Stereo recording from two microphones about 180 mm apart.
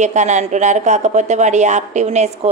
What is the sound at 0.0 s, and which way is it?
Speech, 40° right (ahead or behind).